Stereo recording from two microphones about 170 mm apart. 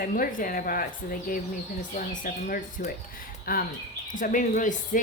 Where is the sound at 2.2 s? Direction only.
55° left (ahead or behind).